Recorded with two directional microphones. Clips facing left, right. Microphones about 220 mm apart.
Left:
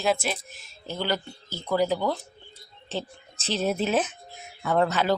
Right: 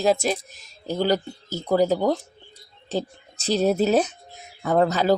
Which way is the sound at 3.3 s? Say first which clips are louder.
Right 6 dB; 40° right (ahead or behind).